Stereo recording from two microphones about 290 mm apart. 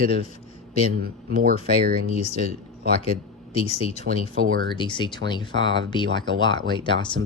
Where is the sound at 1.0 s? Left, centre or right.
Right.